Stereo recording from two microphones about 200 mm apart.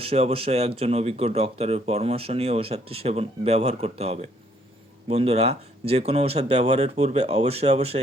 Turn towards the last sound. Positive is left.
turn(degrees=-30)  # may be behind; listen again after turning